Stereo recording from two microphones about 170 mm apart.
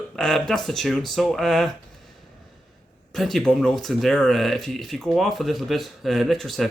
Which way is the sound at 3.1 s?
Centre (ahead or behind).